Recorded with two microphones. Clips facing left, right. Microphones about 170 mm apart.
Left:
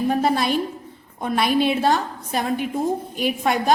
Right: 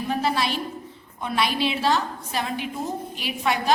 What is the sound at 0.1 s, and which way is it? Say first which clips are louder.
A woman's voice: left 1 dB; 50° left (ahead or behind).